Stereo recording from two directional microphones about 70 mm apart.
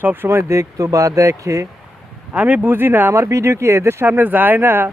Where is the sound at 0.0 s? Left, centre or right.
Right.